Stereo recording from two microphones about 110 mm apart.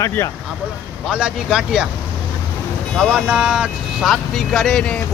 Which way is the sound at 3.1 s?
5° right (ahead or behind).